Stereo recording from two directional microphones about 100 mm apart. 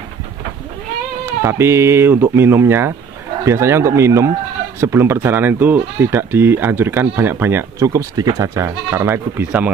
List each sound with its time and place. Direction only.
1.4 s speech: 25° right (ahead or behind)